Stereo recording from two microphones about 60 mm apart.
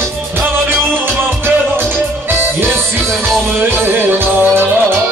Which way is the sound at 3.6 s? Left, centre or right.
Right.